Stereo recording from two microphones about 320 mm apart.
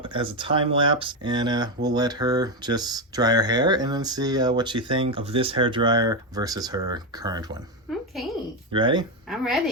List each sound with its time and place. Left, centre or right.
0.0 s speech: centre
7.9 s a sound: centre
8.7 s speech: centre
9.3 s a woman's voice: centre